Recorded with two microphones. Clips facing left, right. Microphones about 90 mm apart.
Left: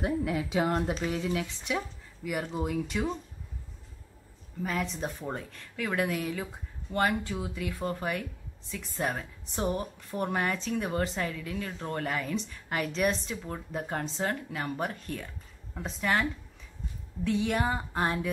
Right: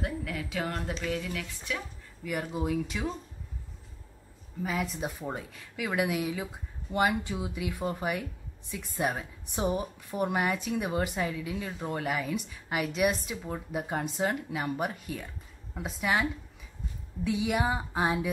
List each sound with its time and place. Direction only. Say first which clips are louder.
0.0 s a woman's voice: left 5 dB; 20° left (ahead or behind)
2.2 s speech: even; centre (ahead or behind)
4.6 s a woman's voice: even; 5° right (ahead or behind)